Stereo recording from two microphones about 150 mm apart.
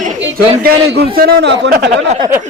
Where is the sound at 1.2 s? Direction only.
90° right.